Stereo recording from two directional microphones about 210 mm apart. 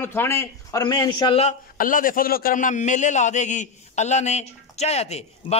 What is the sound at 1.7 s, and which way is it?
A man's voice, 40° left (ahead or behind).